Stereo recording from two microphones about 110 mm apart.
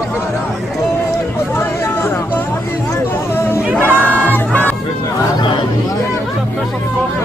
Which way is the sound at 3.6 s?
15° right (ahead or behind).